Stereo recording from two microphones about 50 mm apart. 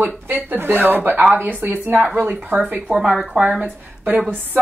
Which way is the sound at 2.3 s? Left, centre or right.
Right.